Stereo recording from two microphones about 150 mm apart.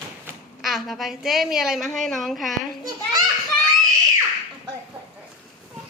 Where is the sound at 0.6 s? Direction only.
Centre (ahead or behind).